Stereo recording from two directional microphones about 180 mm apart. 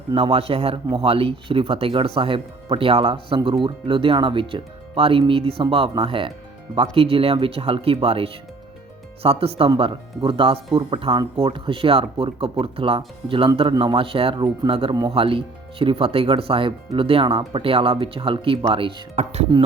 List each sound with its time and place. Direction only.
0.1 s speech: 30° right (ahead or behind)